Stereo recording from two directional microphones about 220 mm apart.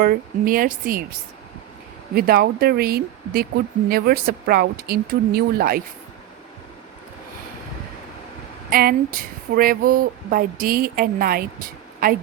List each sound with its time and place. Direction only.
0.0 s speech: 40° right (ahead or behind)
2.1 s speech: 45° right (ahead or behind)
8.7 s speech: 40° right (ahead or behind)